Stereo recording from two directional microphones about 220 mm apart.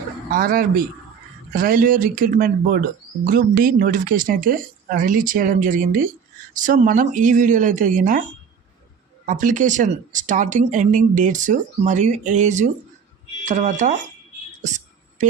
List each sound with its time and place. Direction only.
0.3 s speech: 40° right (ahead or behind)
9.2 s speech: 35° right (ahead or behind)